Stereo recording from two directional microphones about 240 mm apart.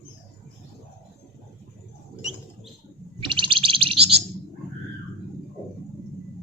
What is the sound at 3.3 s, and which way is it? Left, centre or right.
Bird, right.